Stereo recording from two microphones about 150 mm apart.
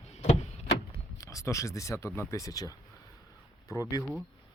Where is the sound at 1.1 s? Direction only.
20° left (ahead or behind).